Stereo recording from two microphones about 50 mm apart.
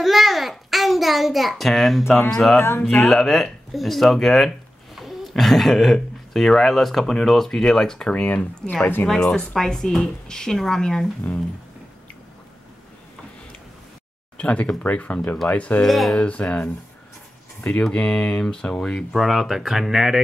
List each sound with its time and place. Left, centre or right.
0.0 s a sound: centre
2.2 s speech: centre
2.6 s speech: left
3.0 s speech: centre
4.9 s a sound: centre
6.3 s speech: centre
8.3 s speech: left
9.0 s speech: centre
14.3 s speech: left
15.8 s speech: centre
16.3 s speech: left
17.9 s speech: left
19.1 s speech: centre